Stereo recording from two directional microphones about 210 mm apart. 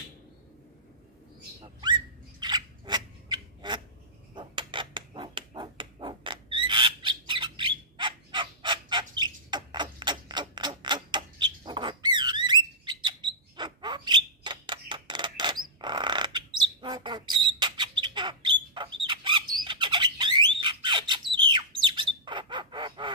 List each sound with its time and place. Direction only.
1.6 s a sound: 20° right (ahead or behind)
12.8 s mouse: 20° right (ahead or behind)
15.8 s bird: 20° right (ahead or behind)